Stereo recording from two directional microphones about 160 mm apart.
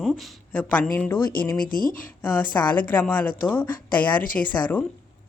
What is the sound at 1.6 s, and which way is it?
Speech, 60° left (ahead or behind).